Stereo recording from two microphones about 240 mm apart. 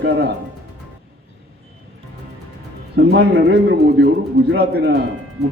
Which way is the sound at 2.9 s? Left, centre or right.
Right.